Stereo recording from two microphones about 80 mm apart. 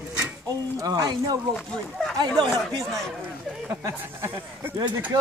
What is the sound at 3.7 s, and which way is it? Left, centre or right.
Speech, right.